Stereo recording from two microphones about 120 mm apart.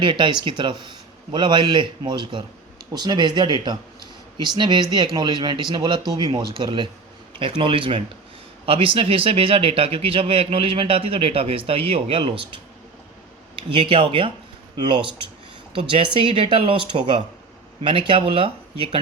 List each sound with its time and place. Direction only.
0.0 s a man's voice: 40° right (ahead or behind)
13.6 s a man's voice: 45° right (ahead or behind)